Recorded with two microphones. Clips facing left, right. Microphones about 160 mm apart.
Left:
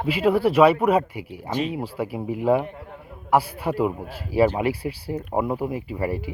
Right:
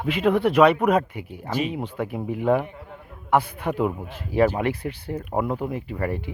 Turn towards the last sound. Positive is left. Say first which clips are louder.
# left 1 dB
turn(degrees=10)  # may be behind; listen again after turning